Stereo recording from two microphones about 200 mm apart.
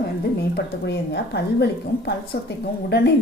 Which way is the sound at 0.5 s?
55° left (ahead or behind).